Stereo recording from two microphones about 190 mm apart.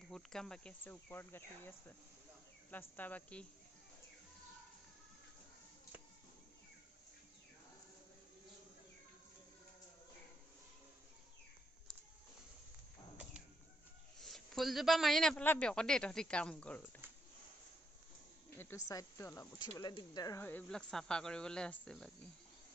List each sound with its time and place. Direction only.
0.1 s a man's voice: 5° left (ahead or behind)
14.2 s a man's voice: centre (ahead or behind)
18.5 s snake: 10° left (ahead or behind)
18.9 s speech: 15° left (ahead or behind)
20.4 s a man's voice: 10° left (ahead or behind)